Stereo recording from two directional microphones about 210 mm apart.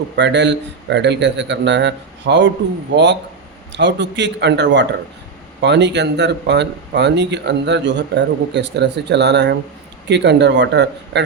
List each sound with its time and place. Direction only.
0.2 s speech: 55° right (ahead or behind)